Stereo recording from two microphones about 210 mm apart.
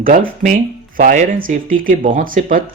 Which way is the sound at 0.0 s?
40° right (ahead or behind).